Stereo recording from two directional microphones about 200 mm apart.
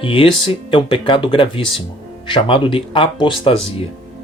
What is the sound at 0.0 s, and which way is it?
Speech, 25° left (ahead or behind).